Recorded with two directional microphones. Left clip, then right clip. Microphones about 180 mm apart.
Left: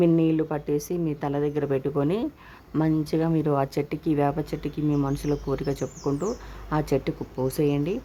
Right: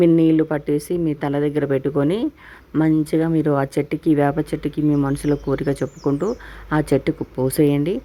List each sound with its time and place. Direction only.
0.0 s speech: 25° right (ahead or behind)